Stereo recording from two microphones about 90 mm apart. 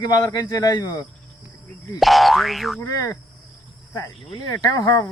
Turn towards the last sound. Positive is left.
turn(degrees=40)  # may be behind; listen again after turning